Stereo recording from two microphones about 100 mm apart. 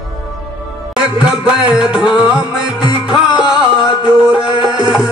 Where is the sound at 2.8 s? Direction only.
50° left (ahead or behind).